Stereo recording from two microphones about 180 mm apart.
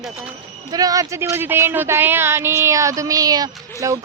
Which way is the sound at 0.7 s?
20° right (ahead or behind).